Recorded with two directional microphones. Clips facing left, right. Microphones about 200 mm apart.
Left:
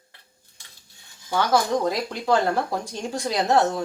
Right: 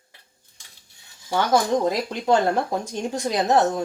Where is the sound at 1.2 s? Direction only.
20° right (ahead or behind).